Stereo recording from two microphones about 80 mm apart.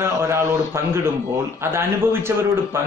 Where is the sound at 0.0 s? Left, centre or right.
Right.